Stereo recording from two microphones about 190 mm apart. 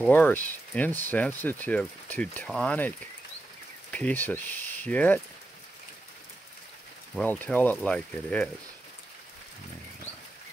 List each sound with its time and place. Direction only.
0.0 s speech: 10° left (ahead or behind)
3.9 s speech: 10° left (ahead or behind)
7.2 s speech: 10° left (ahead or behind)